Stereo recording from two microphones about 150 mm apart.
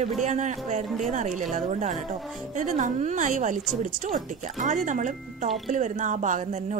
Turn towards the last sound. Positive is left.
turn(degrees=-55)  # may be behind; listen again after turning